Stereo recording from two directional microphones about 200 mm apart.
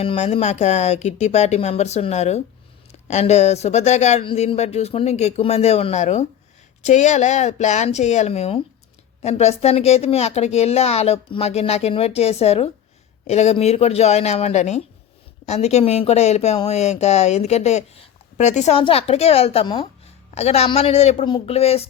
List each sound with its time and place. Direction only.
0.0 s speech: 30° left (ahead or behind)